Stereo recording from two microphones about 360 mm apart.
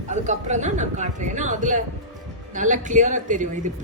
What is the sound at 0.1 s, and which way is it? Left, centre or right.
Speech, centre.